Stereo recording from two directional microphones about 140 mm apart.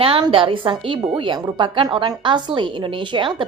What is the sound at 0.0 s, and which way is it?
A woman's voice, 40° right (ahead or behind).